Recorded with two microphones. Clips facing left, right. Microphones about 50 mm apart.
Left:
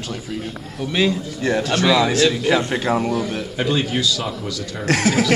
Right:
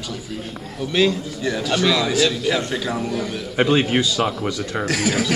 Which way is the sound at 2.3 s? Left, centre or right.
Centre.